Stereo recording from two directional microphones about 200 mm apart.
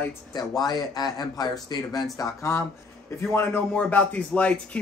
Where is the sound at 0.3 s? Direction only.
20° left (ahead or behind).